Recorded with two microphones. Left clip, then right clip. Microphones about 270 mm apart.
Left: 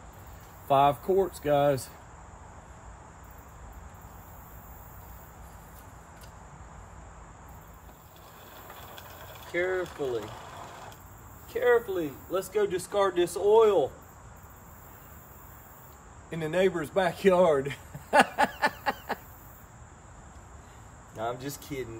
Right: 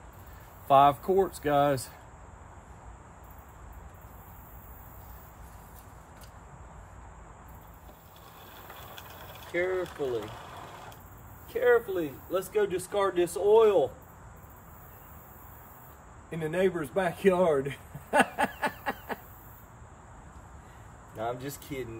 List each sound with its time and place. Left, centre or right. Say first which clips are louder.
0.7 s speech: right 2 dB; centre
8.6 s mechanisms: even; centre
11.5 s speech: even; centre
16.3 s a sound: left 2 dB; centre
21.2 s speech: left 1 dB; centre